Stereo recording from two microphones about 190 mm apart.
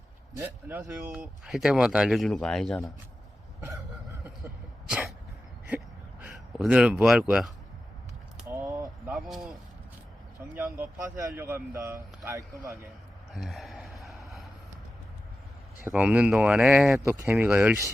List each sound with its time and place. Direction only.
0.3 s speech: 10° right (ahead or behind)
6.6 s speech: 5° right (ahead or behind)
8.6 s a sound: 15° right (ahead or behind)
9.1 s speech: centre (ahead or behind)
10.6 s speech: 10° right (ahead or behind)
13.3 s a sound: centre (ahead or behind)
15.8 s speech: 5° right (ahead or behind)